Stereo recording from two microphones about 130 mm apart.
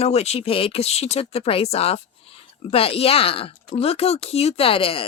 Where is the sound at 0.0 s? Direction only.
55° left (ahead or behind).